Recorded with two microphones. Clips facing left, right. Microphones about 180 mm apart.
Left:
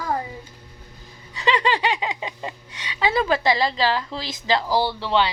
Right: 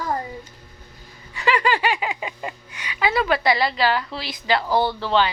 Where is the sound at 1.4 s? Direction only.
20° left (ahead or behind).